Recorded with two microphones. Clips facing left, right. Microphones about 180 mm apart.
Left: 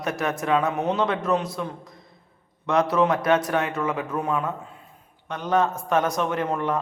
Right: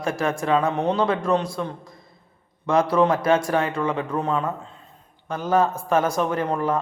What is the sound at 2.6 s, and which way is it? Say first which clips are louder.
Speech: right 2 dB; centre (ahead or behind).